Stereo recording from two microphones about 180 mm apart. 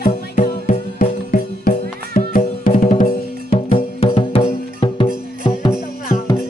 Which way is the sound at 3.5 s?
35° left (ahead or behind).